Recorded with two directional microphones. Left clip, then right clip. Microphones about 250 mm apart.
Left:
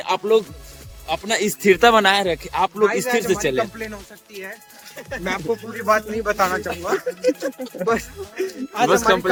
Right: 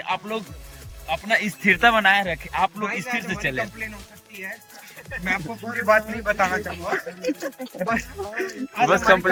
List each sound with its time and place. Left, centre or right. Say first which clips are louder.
0.0 s speech: left 9 dB; centre
5.2 s speech: left 3 dB; centre